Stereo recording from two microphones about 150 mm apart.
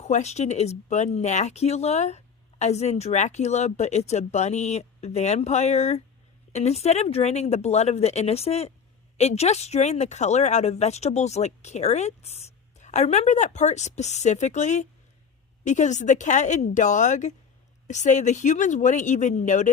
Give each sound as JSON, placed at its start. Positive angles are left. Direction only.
{"t": 0.0, "sound": "speech", "side_deg": 50}